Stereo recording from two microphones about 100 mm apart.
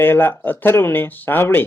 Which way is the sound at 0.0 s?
20° left (ahead or behind).